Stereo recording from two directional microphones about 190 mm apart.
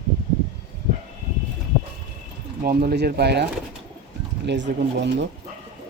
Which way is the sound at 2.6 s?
55° right (ahead or behind).